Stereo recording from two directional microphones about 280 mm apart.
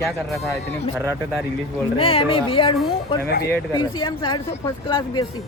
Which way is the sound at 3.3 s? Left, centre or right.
Left.